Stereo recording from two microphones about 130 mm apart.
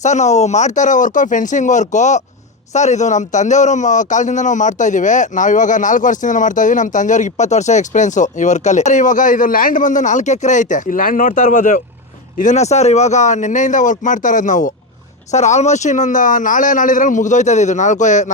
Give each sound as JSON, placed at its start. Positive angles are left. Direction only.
{"t": 0.0, "sound": "a man's voice", "side_deg": 65}
{"t": 12.4, "sound": "a man's voice", "side_deg": 65}
{"t": 15.3, "sound": "a man's voice", "side_deg": 60}